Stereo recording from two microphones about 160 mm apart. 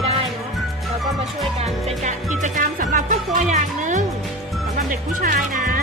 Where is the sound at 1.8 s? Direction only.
45° right (ahead or behind).